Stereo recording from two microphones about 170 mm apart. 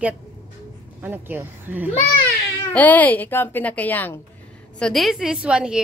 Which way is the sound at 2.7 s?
10° left (ahead or behind).